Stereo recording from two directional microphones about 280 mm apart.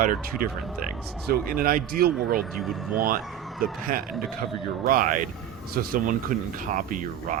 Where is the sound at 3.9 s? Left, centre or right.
Right.